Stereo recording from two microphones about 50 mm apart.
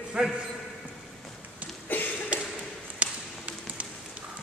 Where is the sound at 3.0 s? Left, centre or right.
Right.